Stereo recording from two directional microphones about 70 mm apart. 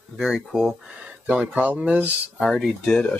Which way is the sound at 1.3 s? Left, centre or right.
Centre.